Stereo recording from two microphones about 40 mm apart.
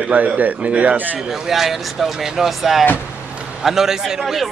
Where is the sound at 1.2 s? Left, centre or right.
Centre.